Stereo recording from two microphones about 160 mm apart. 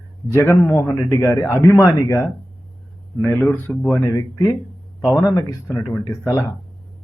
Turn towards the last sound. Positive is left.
turn(degrees=10)  # may be behind; listen again after turning